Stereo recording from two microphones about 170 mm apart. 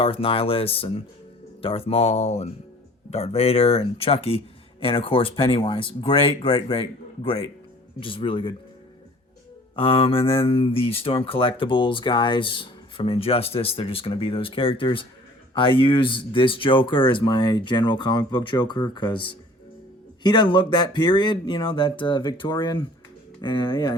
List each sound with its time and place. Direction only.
0.0 s speech: 30° left (ahead or behind)
9.7 s speech: 30° left (ahead or behind)